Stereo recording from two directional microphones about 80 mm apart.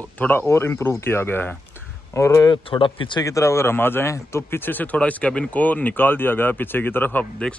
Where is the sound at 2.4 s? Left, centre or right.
Left.